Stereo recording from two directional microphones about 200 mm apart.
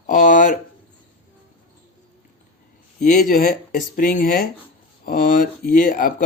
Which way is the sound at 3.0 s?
40° left (ahead or behind).